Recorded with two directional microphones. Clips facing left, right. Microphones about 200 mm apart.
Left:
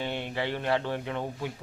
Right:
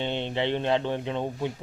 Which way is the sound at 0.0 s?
25° right (ahead or behind).